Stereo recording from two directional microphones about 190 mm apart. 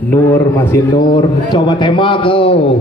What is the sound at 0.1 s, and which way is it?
Speech, 10° left (ahead or behind).